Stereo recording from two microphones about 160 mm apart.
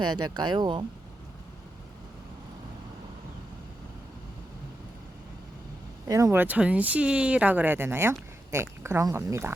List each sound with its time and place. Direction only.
0.0 s speech: 25° right (ahead or behind)
6.1 s speech: 20° right (ahead or behind)